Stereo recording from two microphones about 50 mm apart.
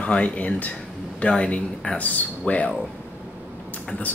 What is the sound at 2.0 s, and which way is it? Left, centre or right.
Speech, left.